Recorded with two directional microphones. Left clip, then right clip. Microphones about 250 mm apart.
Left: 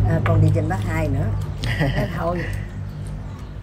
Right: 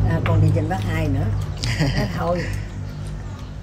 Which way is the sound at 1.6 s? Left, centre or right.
Centre.